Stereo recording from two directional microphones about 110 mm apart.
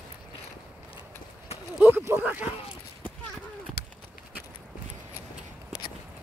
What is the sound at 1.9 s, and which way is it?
Speech, 20° right (ahead or behind).